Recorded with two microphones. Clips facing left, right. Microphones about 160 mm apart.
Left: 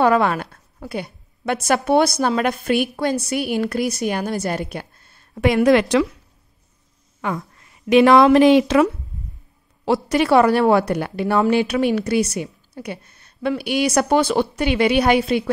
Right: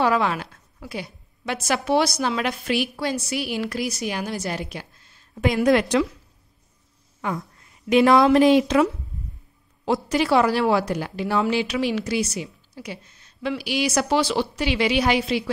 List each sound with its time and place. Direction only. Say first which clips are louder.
0.0 s a woman's voice: left 5 dB; 50° left (ahead or behind)
5.3 s a woman's voice: left 4 dB; 70° left (ahead or behind); by 6.0 s 85° left
7.2 s a woman's voice: left 3 dB; 75° left (ahead or behind)
10.0 s a woman's voice: left 5 dB; 60° left (ahead or behind)